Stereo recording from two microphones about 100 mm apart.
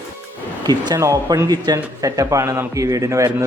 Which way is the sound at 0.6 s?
45° right (ahead or behind).